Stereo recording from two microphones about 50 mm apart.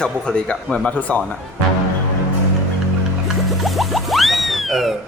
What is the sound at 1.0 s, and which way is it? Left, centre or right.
Speech, left.